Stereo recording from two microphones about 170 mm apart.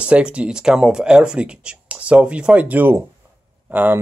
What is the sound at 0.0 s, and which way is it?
Speech, 5° right (ahead or behind).